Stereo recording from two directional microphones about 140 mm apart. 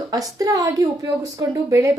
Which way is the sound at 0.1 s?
25° right (ahead or behind).